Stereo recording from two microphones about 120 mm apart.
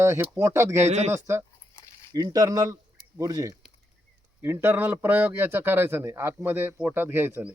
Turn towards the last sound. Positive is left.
turn(degrees=-20)  # may be behind; listen again after turning